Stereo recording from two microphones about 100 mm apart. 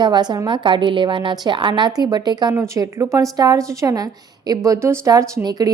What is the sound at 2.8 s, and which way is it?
A woman's voice, 30° right (ahead or behind).